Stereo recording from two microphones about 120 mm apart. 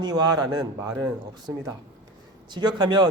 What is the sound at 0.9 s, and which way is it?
Speech, 20° right (ahead or behind).